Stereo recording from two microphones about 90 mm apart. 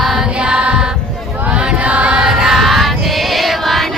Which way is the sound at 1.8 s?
15° right (ahead or behind).